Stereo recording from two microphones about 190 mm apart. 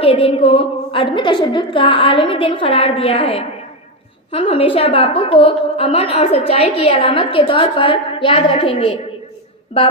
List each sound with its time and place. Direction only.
0.0 s a woman's voice: 30° left (ahead or behind)